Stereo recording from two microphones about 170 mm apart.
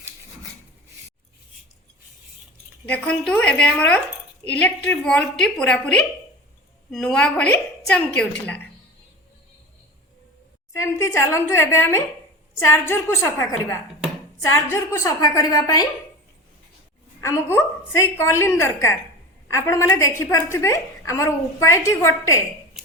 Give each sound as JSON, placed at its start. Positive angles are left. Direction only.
{"t": 2.8, "sound": "a woman's voice", "side_deg": 10}
{"t": 10.7, "sound": "a woman's voice", "side_deg": 15}
{"t": 14.5, "sound": "a woman's voice", "side_deg": 15}
{"t": 17.2, "sound": "a woman's voice", "side_deg": 15}